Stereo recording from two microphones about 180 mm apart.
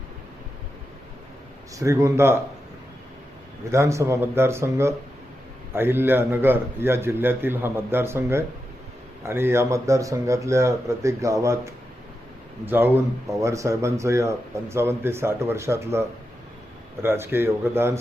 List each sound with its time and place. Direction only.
1.7 s speech: 15° right (ahead or behind)
3.7 s speech: 15° right (ahead or behind)